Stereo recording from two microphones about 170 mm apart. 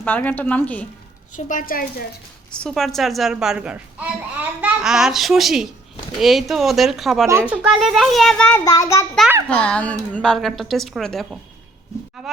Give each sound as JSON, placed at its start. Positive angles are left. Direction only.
{"t": 0.0, "sound": "a woman's voice", "side_deg": 10}
{"t": 1.5, "sound": "speech", "side_deg": 55}
{"t": 2.5, "sound": "a woman's voice", "side_deg": 0}
{"t": 7.3, "sound": "a woman's voice", "side_deg": -10}
{"t": 9.5, "sound": "a woman's voice", "side_deg": 5}